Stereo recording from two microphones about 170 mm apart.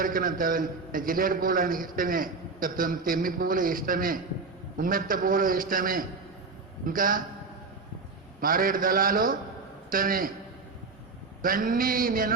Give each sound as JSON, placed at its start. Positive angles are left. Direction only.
{"t": 0.0, "sound": "a man's voice", "side_deg": -55}
{"t": 8.4, "sound": "a man's voice", "side_deg": -55}
{"t": 11.4, "sound": "a man's voice", "side_deg": -55}